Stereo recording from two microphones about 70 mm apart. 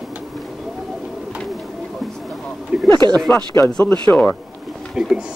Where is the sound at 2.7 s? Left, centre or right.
Centre.